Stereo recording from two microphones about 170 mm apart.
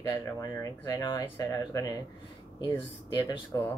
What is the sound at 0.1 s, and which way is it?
Speech, 20° left (ahead or behind).